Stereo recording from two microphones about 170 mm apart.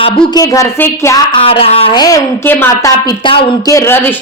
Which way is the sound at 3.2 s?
30° left (ahead or behind).